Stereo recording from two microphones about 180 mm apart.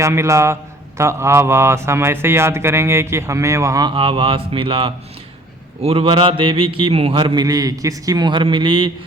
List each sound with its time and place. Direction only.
0.0 s a man's voice: 15° right (ahead or behind)